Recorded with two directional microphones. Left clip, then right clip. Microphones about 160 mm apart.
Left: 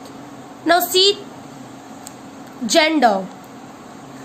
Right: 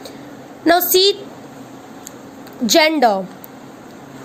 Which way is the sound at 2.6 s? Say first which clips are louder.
Right 1 dB; 45° right (ahead or behind).